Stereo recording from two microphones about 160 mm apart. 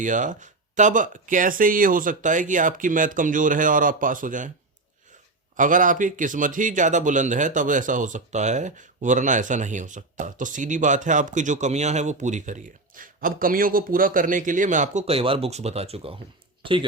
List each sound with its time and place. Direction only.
0.0 s speech: 55° right (ahead or behind)
5.5 s speech: 55° right (ahead or behind); by 16.1 s 40° right (ahead or behind)